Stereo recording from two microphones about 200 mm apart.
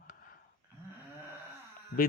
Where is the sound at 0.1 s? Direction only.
45° left (ahead or behind).